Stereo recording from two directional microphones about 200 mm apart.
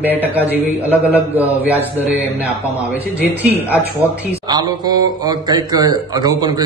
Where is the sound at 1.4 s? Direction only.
10° right (ahead or behind).